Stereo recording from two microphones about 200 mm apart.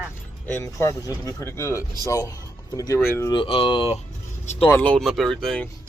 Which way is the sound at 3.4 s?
25° left (ahead or behind).